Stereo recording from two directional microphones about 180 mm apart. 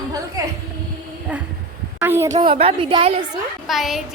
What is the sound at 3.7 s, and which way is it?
Speech, centre (ahead or behind).